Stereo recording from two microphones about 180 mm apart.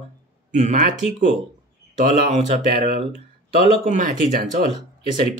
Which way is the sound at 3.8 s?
45° right (ahead or behind).